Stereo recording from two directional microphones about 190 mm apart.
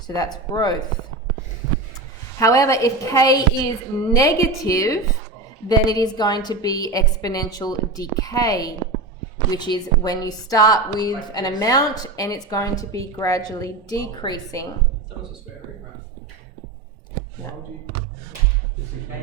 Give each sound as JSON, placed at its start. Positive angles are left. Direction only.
{"t": 0.5, "sound": "a woman's voice", "side_deg": 20}
{"t": 2.4, "sound": "a woman's voice", "side_deg": 15}